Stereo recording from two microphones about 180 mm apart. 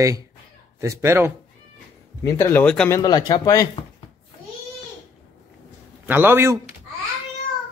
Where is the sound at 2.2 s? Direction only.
15° left (ahead or behind).